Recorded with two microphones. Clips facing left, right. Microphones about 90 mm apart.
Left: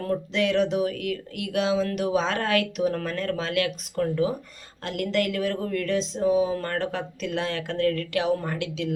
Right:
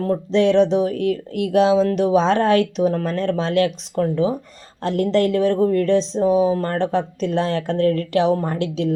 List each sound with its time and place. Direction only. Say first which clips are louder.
0.0 s speech: right 8 dB; 30° right (ahead or behind)